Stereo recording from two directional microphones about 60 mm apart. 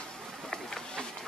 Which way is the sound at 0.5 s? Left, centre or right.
Centre.